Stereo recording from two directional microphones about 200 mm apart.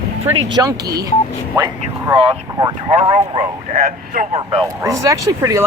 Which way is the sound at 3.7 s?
45° right (ahead or behind).